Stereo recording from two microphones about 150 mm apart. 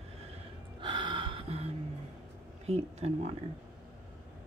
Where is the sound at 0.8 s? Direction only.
35° right (ahead or behind).